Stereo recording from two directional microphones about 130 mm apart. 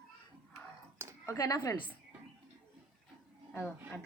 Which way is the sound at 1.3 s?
25° left (ahead or behind).